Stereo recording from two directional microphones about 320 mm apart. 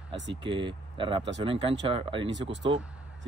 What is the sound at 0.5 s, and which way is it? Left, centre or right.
A man's voice, centre.